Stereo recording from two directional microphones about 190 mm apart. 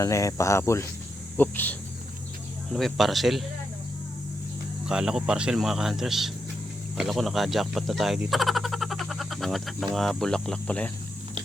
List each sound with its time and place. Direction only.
0.0 s speech: 15° left (ahead or behind)
2.7 s speech: centre (ahead or behind)
4.9 s speech: 5° right (ahead or behind)